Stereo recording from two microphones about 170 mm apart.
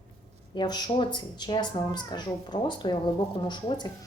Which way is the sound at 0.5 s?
25° left (ahead or behind).